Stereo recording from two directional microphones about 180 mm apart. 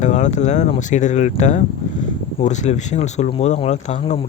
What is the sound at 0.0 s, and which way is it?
Speech, 40° left (ahead or behind).